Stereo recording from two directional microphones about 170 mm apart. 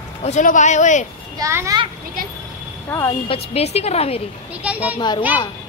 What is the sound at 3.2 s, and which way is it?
Speech, 35° left (ahead or behind).